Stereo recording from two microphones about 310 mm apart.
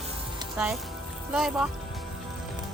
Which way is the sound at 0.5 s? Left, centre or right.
Centre.